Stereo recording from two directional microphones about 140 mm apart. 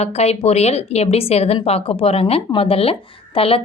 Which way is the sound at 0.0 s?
50° left (ahead or behind).